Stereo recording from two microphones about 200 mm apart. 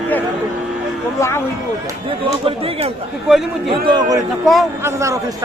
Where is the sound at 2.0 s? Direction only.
30° right (ahead or behind).